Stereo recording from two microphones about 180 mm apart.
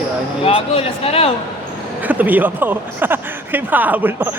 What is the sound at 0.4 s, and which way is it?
Speech, 30° left (ahead or behind).